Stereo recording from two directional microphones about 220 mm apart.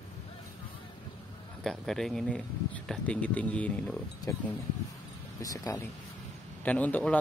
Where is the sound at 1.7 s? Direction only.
Centre (ahead or behind).